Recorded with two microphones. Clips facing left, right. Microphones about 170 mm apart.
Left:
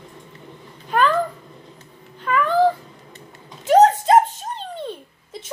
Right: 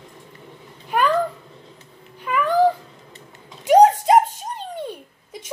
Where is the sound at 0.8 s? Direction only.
10° right (ahead or behind).